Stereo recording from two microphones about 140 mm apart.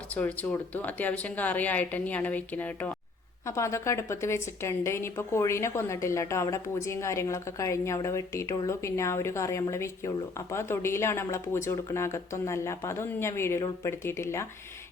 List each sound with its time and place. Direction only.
0.1 s a woman's voice: 10° left (ahead or behind)